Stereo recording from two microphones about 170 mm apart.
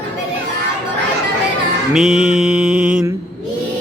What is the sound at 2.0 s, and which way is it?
Speech, 5° right (ahead or behind).